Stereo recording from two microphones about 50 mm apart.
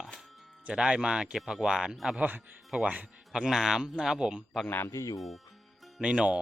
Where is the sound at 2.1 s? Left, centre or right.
Right.